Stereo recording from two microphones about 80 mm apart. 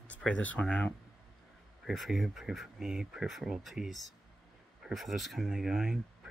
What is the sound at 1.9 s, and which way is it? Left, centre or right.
Speech, centre.